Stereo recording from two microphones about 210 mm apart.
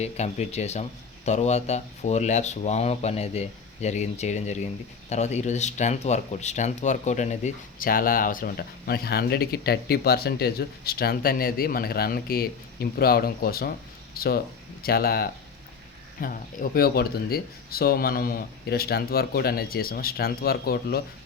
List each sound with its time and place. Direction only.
0.0 s speech: 30° left (ahead or behind); by 21.0 s 45° left (ahead or behind)